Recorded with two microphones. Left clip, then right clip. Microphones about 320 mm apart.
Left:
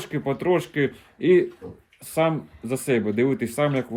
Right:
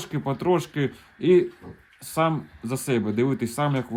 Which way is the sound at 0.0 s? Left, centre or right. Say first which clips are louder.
Left 1 dB; centre.